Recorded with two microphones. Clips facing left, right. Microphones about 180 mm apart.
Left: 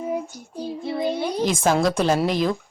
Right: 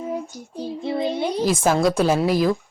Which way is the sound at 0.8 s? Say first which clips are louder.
Right 3 dB; 25° right (ahead or behind).